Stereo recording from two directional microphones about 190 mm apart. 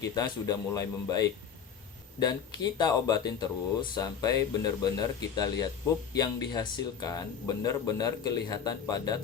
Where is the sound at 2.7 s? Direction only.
20° left (ahead or behind).